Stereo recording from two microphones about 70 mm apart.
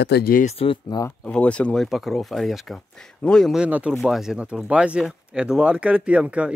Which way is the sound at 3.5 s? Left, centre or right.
Centre.